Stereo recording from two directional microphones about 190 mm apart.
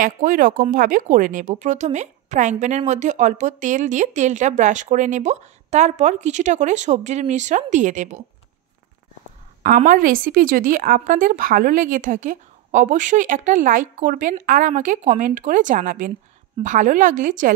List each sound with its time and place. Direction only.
0.0 s speech: 45° right (ahead or behind)
9.6 s a woman's voice: 45° right (ahead or behind)